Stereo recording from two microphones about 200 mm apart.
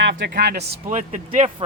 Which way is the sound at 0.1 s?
60° right (ahead or behind).